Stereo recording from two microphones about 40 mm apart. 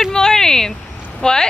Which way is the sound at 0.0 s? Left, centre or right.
Centre.